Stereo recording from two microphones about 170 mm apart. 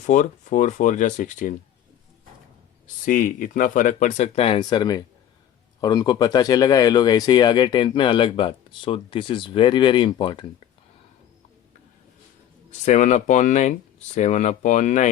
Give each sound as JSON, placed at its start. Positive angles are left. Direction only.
{"t": 0.0, "sound": "speech", "side_deg": 50}
{"t": 2.8, "sound": "speech", "side_deg": 50}
{"t": 4.4, "sound": "speech", "side_deg": 30}
{"t": 12.8, "sound": "speech", "side_deg": 45}